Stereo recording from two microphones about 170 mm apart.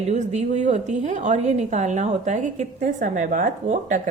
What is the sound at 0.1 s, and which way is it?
A woman's voice, 45° right (ahead or behind).